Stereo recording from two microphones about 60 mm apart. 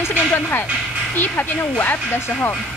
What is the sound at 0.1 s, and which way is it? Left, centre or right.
Speech, left.